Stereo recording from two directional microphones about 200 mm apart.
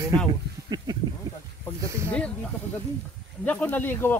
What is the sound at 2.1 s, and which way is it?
Speech, 5° left (ahead or behind).